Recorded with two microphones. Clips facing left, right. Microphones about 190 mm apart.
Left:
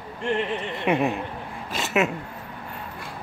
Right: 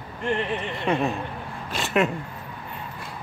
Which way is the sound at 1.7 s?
Centre (ahead or behind).